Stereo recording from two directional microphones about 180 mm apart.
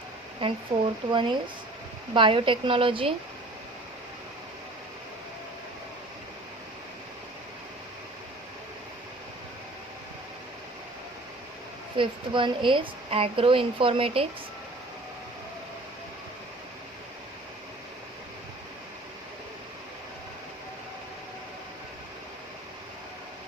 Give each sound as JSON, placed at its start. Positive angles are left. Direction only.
{"t": 0.4, "sound": "a woman's voice", "side_deg": -30}
{"t": 11.9, "sound": "a woman's voice", "side_deg": -30}